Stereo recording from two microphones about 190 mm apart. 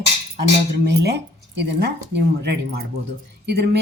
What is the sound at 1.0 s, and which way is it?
Speech, 60° right (ahead or behind).